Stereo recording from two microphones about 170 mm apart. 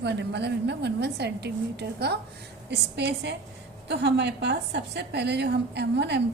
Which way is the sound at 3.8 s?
85° right.